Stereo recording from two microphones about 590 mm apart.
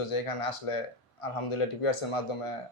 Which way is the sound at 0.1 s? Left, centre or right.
Left.